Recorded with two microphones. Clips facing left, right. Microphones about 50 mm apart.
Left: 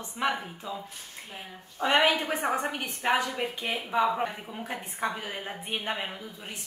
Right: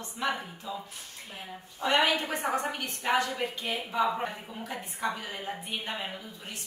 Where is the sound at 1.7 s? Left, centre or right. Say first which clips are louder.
Left 2 dB; left.